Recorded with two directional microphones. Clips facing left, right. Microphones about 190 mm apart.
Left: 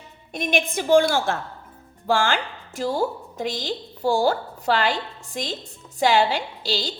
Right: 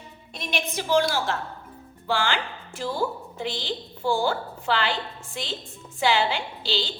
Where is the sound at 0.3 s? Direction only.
50° left (ahead or behind).